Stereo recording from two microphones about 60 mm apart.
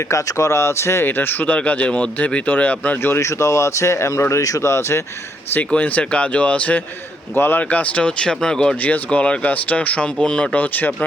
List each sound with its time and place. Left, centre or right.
0.1 s speech: left
1.1 s speech: left
3.2 s speech: left
5.5 s speech: left
7.3 s speech: left
7.6 s speech: left
8.8 s speech: left
10.6 s speech: left